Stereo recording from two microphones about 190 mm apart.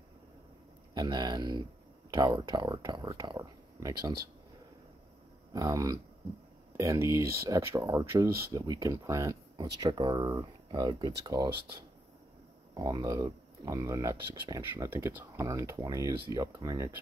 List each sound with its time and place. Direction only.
0.9 s speech: 20° right (ahead or behind)
5.5 s speech: 20° right (ahead or behind)
12.7 s speech: 20° right (ahead or behind)